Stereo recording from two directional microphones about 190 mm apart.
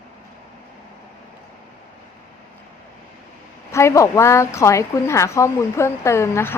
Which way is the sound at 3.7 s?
15° left (ahead or behind).